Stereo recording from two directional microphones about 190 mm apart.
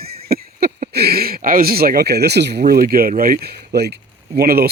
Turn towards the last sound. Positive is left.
turn(degrees=-55)  # may be behind; listen again after turning